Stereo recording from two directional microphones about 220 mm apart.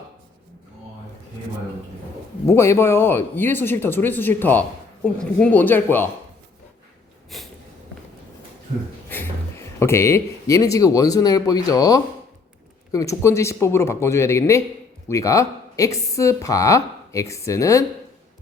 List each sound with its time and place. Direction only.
2.5 s a woman's voice: 10° left (ahead or behind)
7.3 s snort: centre (ahead or behind)
9.0 s a woman's voice: 10° left (ahead or behind)